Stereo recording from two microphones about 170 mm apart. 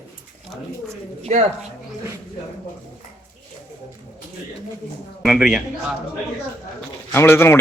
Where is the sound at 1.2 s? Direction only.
45° right (ahead or behind).